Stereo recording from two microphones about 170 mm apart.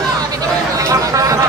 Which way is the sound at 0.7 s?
20° right (ahead or behind).